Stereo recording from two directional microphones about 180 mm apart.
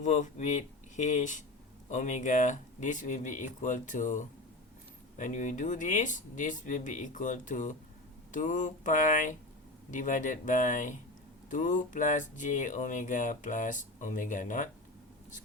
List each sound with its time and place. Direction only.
0.0 s speech: 40° left (ahead or behind)